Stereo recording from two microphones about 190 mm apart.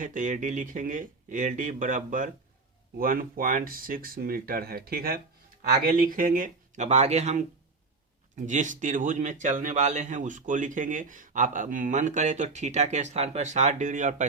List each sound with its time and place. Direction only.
0.0 s a man's voice: 45° right (ahead or behind)